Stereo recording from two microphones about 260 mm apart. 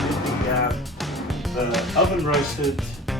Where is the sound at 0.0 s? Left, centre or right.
Centre.